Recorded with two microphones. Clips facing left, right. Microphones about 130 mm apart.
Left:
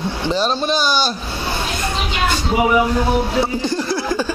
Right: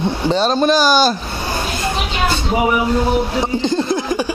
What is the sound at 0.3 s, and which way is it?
Speech, 30° right (ahead or behind).